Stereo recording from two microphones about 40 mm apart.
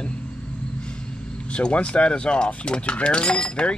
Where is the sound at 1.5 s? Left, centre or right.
Left.